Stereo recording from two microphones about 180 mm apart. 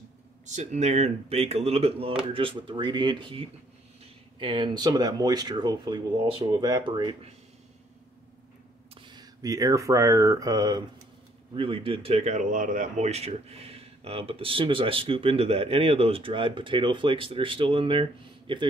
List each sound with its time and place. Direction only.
0.5 s speech: 40° right (ahead or behind); by 7.2 s 25° right (ahead or behind)
9.0 s speech: 25° right (ahead or behind)